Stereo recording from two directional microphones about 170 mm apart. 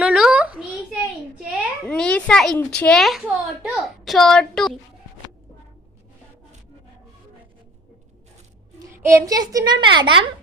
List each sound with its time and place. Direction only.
0.0 s a sound: 5° right (ahead or behind)
1.9 s a child's voice: 5° left (ahead or behind)
9.0 s a child's voice: 15° right (ahead or behind)